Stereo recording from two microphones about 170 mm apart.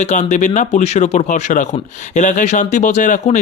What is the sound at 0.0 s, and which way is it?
Speech, 45° left (ahead or behind).